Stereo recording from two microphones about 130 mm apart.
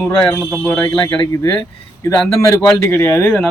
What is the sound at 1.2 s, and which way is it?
Speech, 25° left (ahead or behind).